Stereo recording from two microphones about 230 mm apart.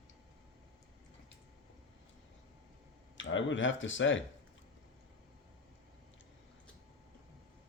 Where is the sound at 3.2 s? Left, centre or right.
Left.